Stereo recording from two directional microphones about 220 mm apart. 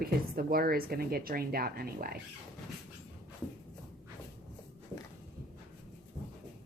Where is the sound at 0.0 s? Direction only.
40° right (ahead or behind).